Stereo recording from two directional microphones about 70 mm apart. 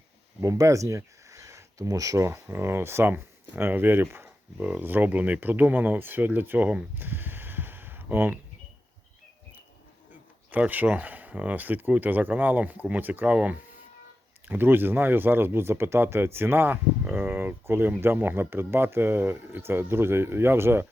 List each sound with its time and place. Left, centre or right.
0.4 s speech: right
6.9 s a sound: right
10.1 s speech: right